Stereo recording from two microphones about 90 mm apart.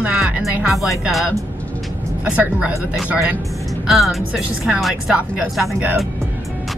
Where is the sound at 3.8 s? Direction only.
Centre (ahead or behind).